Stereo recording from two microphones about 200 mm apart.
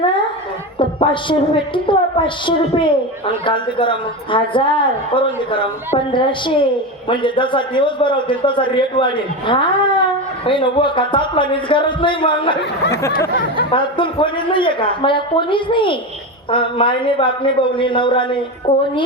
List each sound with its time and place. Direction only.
0.8 s a woman's voice: 25° left (ahead or behind)
13.7 s a woman's voice: 25° left (ahead or behind)